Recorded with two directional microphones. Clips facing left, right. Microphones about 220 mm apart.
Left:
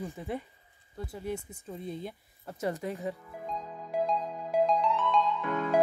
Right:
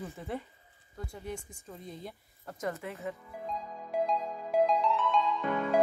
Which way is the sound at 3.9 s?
Centre (ahead or behind).